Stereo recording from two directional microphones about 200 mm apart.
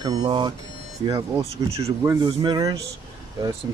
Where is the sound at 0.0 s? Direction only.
20° right (ahead or behind).